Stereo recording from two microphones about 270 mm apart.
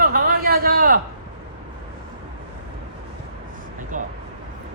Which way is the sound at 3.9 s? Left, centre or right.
Right.